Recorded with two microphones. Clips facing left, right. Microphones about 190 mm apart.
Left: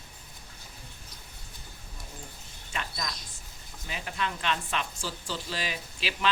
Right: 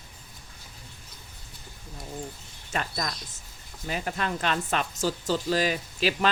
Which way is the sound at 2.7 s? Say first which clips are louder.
Right 5 dB; 45° right (ahead or behind).